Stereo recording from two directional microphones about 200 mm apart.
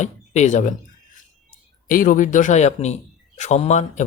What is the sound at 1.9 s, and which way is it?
Speech, 45° left (ahead or behind).